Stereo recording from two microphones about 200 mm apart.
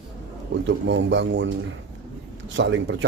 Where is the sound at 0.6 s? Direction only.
65° right (ahead or behind).